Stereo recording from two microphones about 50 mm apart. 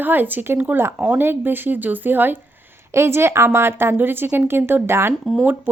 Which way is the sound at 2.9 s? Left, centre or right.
Right.